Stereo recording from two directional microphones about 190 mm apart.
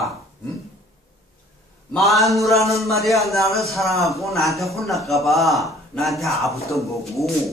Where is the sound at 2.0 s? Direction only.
Centre (ahead or behind).